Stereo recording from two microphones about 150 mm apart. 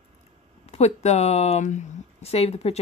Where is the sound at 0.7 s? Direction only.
45° left (ahead or behind).